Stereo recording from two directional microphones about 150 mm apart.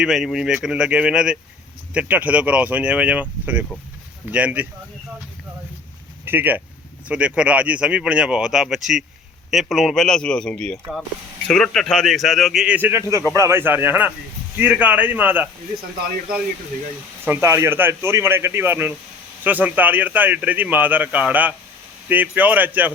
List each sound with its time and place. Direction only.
0.0 s speech: centre (ahead or behind)
6.2 s speech: 10° right (ahead or behind)
17.2 s speech: 15° right (ahead or behind)